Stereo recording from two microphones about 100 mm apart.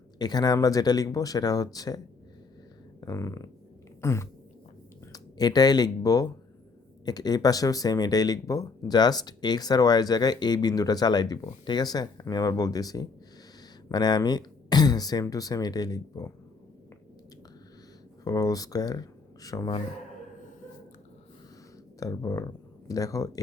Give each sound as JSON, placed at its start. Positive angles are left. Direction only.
{"t": 0.2, "sound": "speech", "side_deg": 45}
{"t": 3.0, "sound": "a sound", "side_deg": 35}
{"t": 4.0, "sound": "throat clearing", "side_deg": 25}
{"t": 5.1, "sound": "speech", "side_deg": 40}
{"t": 18.3, "sound": "speech", "side_deg": 35}
{"t": 22.0, "sound": "speech", "side_deg": 35}